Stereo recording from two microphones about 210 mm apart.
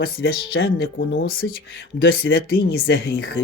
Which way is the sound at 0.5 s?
60° left (ahead or behind).